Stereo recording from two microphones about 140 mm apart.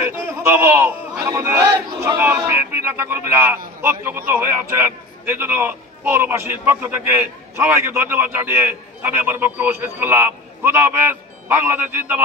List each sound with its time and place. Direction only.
0.0 s a man's voice: 15° right (ahead or behind)